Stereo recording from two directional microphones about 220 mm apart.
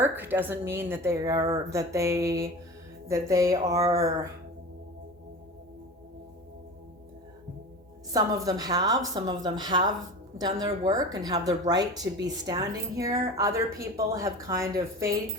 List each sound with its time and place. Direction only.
0.0 s a woman's voice: 10° right (ahead or behind)
8.1 s a woman's voice: 15° right (ahead or behind)